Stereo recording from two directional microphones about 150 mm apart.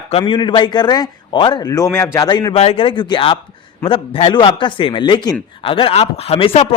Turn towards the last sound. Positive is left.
turn(degrees=40)  # may be behind; listen again after turning